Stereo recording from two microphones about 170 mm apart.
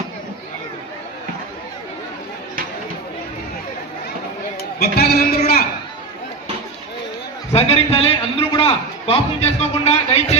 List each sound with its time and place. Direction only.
4.8 s speech: 70° left (ahead or behind)
7.5 s a man's voice: 35° left (ahead or behind)